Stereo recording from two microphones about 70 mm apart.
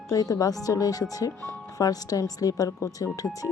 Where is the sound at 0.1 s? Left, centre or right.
Left.